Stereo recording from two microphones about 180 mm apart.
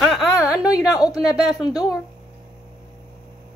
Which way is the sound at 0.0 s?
5° right (ahead or behind).